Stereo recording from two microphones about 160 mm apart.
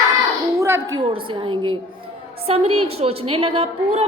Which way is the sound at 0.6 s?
20° right (ahead or behind).